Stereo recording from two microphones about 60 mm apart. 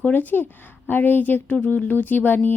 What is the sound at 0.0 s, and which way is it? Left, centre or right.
A woman's voice, left.